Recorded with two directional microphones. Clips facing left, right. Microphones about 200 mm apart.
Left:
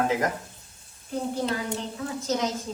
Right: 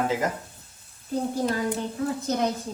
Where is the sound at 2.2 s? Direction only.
55° right (ahead or behind).